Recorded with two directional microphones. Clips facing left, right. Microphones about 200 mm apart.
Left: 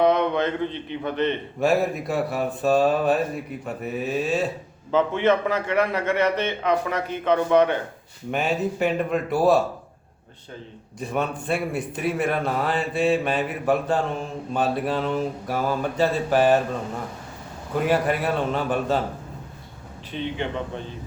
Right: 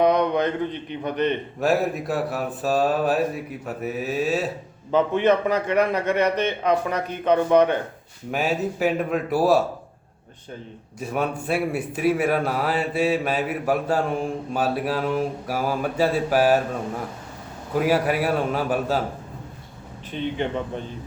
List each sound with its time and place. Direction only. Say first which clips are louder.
0.0 s a man's voice: right 1 dB; 15° right (ahead or behind)
1.5 s speech: left 2 dB; centre (ahead or behind)
4.9 s a man's voice: right 1 dB; 15° right (ahead or behind)
8.3 s speech: even; 5° right (ahead or behind)
11.0 s a man's voice: right 1 dB; 5° right (ahead or behind)
17.7 s speech: right 1 dB; 5° right (ahead or behind)